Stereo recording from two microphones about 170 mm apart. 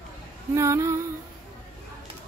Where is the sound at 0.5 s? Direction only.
15° right (ahead or behind).